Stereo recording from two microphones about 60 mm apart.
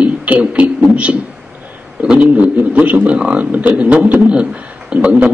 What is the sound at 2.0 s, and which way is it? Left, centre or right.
A man's voice, right.